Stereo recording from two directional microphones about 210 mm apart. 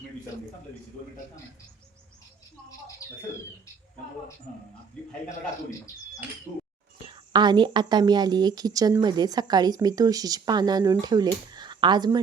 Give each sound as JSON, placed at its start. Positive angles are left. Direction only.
{"t": 3.0, "sound": "bird", "side_deg": 15}
{"t": 7.1, "sound": "a woman's voice", "side_deg": -20}